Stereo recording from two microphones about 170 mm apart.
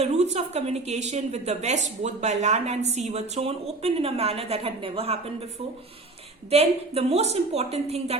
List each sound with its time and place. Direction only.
0.0 s a woman's voice: 40° right (ahead or behind)